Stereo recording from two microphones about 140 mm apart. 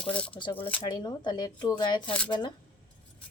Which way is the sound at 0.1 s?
10° left (ahead or behind).